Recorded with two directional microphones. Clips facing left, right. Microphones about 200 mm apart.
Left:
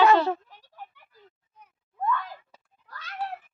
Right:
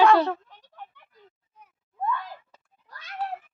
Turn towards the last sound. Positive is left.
turn(degrees=-15)  # may be behind; listen again after turning